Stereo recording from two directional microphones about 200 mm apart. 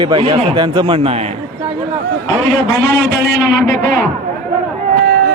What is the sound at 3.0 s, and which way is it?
Speech, 60° right (ahead or behind).